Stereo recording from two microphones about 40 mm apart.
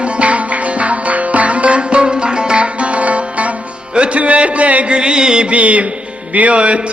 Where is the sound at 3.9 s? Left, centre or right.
Right.